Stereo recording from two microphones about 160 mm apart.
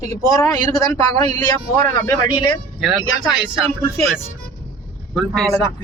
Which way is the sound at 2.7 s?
Centre (ahead or behind).